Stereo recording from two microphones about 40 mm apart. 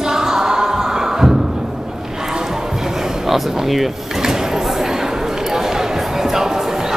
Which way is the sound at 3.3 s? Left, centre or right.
Centre.